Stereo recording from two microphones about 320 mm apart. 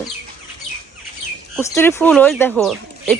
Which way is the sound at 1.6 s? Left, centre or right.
Centre.